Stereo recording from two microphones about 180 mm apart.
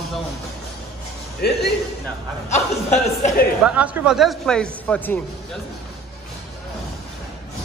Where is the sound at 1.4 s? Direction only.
60° left (ahead or behind).